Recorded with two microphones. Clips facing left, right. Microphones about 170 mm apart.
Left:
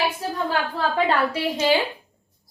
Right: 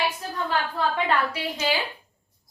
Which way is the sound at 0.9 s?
30° left (ahead or behind).